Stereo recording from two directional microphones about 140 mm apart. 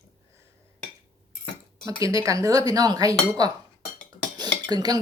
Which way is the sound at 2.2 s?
25° right (ahead or behind).